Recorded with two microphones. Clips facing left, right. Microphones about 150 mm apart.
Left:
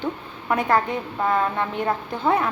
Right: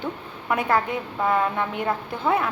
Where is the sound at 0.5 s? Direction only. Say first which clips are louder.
Left 2 dB; 10° right (ahead or behind).